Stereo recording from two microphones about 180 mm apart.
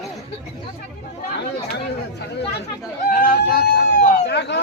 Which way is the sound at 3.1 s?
50° left (ahead or behind).